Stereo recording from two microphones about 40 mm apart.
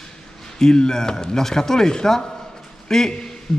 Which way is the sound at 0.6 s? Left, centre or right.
Centre.